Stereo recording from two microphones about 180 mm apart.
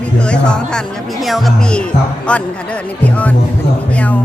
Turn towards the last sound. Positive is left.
turn(degrees=10)  # may be behind; listen again after turning